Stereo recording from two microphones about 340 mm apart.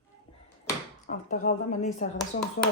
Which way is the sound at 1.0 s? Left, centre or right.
Left.